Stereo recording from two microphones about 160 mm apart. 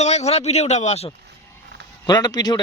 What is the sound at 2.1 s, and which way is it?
Speech, 25° left (ahead or behind).